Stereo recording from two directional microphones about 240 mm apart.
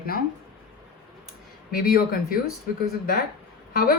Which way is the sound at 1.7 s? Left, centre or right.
Left.